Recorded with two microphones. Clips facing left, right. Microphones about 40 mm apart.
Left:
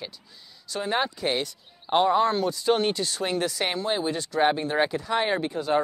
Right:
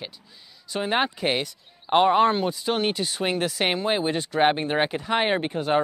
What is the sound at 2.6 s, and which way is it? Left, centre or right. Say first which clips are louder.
Speech: left 1 dB; centre.